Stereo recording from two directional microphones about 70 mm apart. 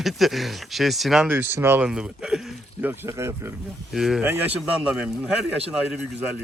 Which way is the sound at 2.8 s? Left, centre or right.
Right.